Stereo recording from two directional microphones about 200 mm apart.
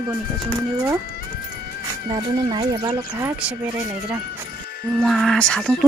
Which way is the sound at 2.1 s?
25° right (ahead or behind).